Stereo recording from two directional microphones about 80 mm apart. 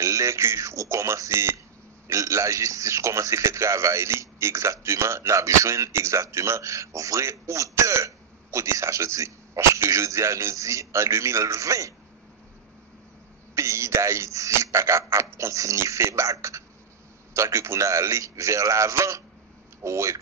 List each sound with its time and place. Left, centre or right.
0.0 s a man's voice: right
13.6 s a man's voice: right